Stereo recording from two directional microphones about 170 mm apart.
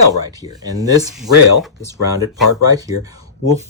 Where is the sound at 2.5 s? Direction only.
20° right (ahead or behind).